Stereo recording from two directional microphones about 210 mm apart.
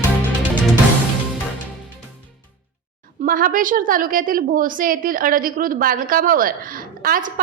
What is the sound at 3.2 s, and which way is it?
A woman's voice, 40° right (ahead or behind).